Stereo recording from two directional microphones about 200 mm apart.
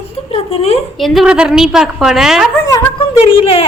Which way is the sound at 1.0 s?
Centre (ahead or behind).